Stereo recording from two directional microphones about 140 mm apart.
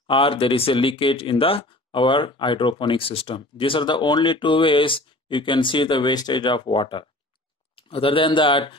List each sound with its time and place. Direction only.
0.0 s speech: 40° left (ahead or behind)